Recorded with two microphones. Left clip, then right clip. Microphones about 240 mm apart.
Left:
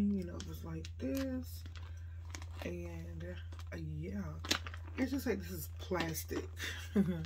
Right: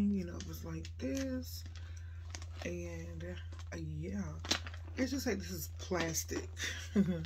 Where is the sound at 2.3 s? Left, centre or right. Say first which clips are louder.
Right 1 dB; centre.